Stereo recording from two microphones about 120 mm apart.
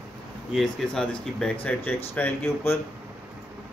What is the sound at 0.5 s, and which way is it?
Speech, centre (ahead or behind).